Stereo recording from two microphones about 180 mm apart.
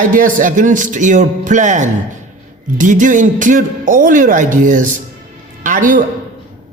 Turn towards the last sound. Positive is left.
turn(degrees=-50)  # may be behind; listen again after turning